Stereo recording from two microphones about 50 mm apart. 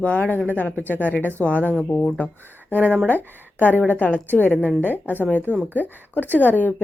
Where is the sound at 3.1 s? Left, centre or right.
Left.